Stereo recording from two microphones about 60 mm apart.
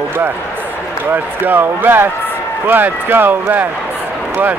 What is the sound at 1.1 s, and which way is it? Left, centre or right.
Speech, right.